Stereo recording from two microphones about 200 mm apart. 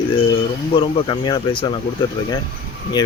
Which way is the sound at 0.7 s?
25° left (ahead or behind).